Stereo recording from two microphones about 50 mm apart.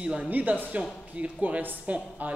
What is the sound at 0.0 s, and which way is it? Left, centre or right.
Speech, right.